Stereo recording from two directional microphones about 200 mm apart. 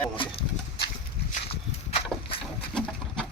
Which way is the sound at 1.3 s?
30° left (ahead or behind).